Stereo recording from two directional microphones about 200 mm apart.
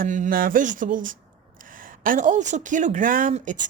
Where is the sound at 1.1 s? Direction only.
45° right (ahead or behind).